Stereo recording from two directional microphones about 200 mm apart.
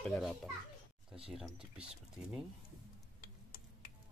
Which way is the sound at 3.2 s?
45° left (ahead or behind).